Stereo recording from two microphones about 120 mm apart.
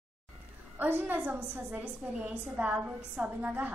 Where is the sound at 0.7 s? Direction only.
15° right (ahead or behind).